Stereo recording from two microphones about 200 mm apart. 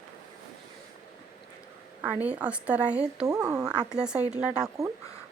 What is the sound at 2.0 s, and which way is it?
A woman's voice, 5° right (ahead or behind).